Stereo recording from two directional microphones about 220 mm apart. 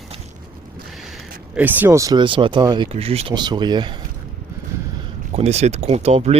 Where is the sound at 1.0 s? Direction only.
5° right (ahead or behind); by 3.9 s 20° right (ahead or behind).